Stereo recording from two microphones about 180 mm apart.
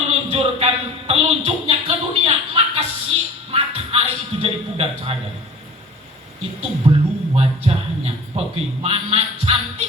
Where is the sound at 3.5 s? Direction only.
35° right (ahead or behind).